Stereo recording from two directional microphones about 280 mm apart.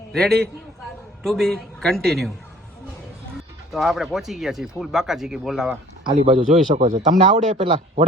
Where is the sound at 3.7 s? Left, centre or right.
Centre.